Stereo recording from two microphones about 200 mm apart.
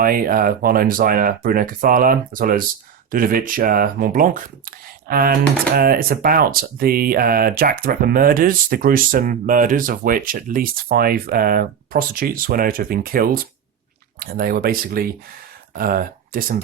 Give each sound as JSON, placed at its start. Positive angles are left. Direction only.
{"t": 0.0, "sound": "speech", "side_deg": -45}